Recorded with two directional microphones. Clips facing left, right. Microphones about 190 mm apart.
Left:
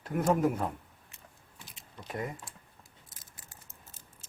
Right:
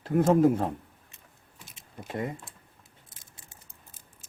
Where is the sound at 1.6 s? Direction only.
25° right (ahead or behind).